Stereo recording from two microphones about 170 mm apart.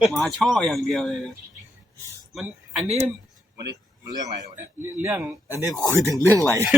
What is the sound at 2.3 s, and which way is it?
Speech, 5° right (ahead or behind).